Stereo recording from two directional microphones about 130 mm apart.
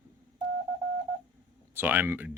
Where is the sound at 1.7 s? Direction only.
15° right (ahead or behind).